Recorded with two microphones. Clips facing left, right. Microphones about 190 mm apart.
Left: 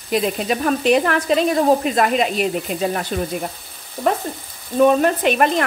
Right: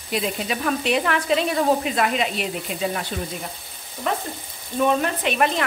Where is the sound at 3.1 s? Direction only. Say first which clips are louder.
Left 6 dB; 55° left (ahead or behind).